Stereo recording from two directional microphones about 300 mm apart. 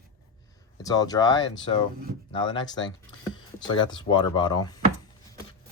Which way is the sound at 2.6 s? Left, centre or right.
Centre.